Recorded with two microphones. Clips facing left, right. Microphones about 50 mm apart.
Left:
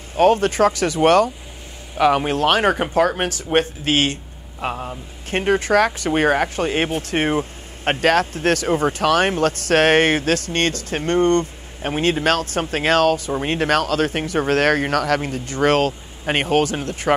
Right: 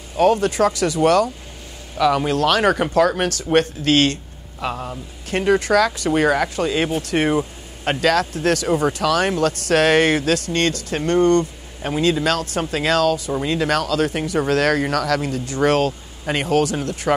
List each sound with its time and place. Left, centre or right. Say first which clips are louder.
0.1 s a man's voice: left 1 dB; left
5.3 s speech: right 1 dB; left